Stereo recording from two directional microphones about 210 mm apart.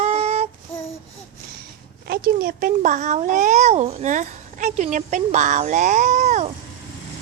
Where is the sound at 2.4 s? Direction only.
40° right (ahead or behind).